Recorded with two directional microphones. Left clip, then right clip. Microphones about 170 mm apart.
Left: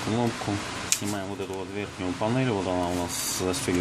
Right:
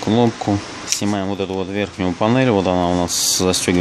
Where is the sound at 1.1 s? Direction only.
60° right (ahead or behind).